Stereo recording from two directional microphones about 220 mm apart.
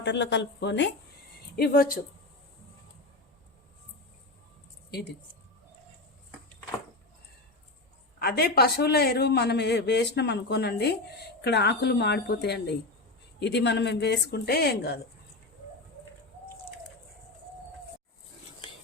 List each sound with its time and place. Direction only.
0.0 s a man's voice: 55° left (ahead or behind)
8.2 s a man's voice: 45° left (ahead or behind)